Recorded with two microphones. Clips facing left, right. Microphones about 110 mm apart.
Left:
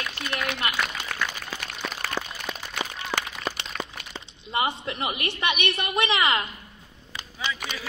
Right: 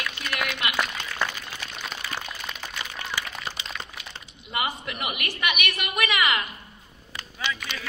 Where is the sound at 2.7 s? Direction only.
65° left (ahead or behind).